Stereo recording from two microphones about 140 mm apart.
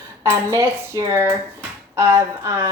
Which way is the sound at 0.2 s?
20° right (ahead or behind).